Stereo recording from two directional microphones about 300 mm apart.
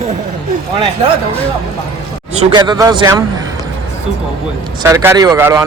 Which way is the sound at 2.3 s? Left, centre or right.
Centre.